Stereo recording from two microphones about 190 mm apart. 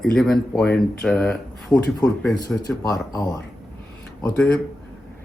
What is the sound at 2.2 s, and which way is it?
Speech, 15° left (ahead or behind).